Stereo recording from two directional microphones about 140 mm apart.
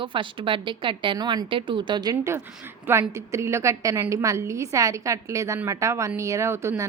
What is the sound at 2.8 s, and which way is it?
A woman's voice, 15° right (ahead or behind).